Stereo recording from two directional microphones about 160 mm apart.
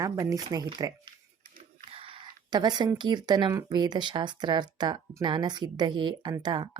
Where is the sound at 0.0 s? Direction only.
20° right (ahead or behind).